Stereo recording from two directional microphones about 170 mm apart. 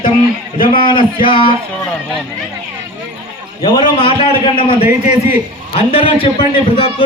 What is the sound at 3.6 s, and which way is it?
Speech, 30° left (ahead or behind).